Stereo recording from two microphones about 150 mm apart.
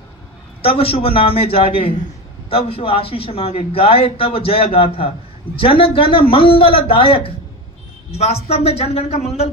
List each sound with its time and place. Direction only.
0.6 s speech: 40° left (ahead or behind)